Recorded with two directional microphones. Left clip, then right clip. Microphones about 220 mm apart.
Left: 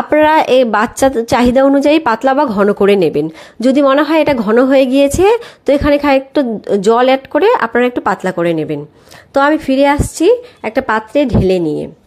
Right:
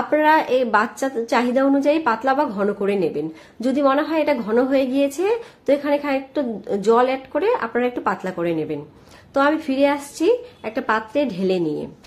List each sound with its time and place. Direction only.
0.1 s a woman's voice: 35° left (ahead or behind)